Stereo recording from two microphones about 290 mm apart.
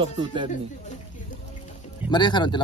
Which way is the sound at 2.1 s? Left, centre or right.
Centre.